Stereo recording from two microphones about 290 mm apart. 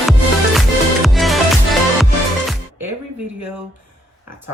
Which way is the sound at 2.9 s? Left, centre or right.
Right.